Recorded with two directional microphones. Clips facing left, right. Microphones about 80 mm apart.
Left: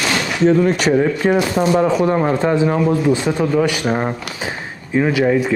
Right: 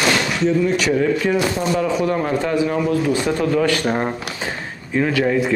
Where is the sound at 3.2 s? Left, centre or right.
Centre.